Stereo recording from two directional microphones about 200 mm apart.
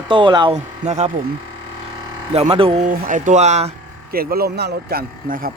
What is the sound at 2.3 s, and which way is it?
Speech, 30° right (ahead or behind).